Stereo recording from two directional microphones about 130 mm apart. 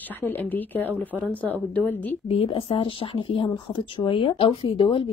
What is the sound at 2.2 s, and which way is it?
Speech, 45° left (ahead or behind).